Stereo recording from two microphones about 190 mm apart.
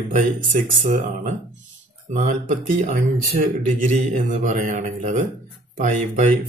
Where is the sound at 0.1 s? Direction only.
45° right (ahead or behind).